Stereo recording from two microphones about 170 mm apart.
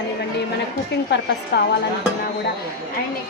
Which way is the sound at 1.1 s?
90° left.